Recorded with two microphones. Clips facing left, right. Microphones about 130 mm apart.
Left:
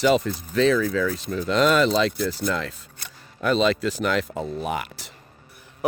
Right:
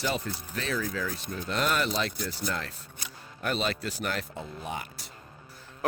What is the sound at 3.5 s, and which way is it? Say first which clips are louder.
Speech: left 11 dB; 90° left.